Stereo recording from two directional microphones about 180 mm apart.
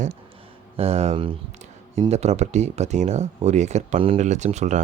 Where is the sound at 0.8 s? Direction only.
35° right (ahead or behind).